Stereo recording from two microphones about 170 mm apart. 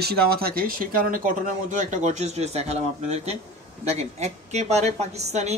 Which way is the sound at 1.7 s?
45° right (ahead or behind).